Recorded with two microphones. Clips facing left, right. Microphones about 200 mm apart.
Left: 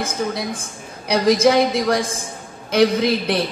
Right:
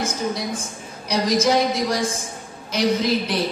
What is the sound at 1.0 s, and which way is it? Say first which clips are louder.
Speech: left 5 dB; 60° left (ahead or behind).